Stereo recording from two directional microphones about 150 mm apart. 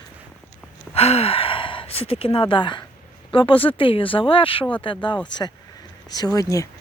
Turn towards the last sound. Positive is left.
turn(degrees=25)  # may be behind; listen again after turning